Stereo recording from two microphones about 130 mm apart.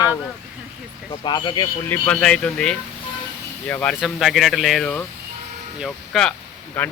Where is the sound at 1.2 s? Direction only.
35° left (ahead or behind).